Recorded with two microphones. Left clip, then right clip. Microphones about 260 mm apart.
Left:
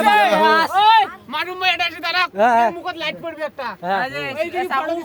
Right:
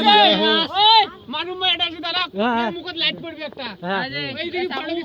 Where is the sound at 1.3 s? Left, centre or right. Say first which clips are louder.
Left 1 dB; left.